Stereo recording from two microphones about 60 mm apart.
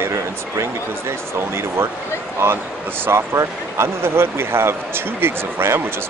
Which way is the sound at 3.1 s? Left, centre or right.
Right.